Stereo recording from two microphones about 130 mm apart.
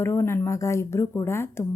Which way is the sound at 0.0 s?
20° left (ahead or behind).